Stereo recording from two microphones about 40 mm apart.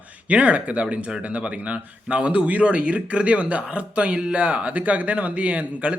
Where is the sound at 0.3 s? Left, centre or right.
Right.